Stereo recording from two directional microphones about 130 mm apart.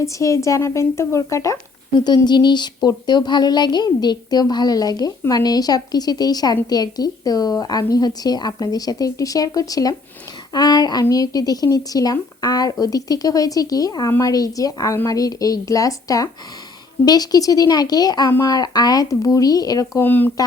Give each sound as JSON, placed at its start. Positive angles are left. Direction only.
{"t": 0.0, "sound": "a woman's voice", "side_deg": 25}
{"t": 2.0, "sound": "a woman's voice", "side_deg": 35}
{"t": 10.5, "sound": "a sound", "side_deg": 30}
{"t": 11.0, "sound": "a woman's voice", "side_deg": 30}
{"t": 20.0, "sound": "speech", "side_deg": 15}